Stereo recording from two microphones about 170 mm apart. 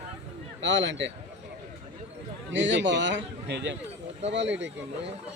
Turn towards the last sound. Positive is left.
turn(degrees=-90)